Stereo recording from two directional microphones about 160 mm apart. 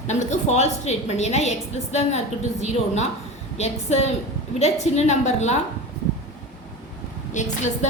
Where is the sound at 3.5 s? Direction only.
45° left (ahead or behind).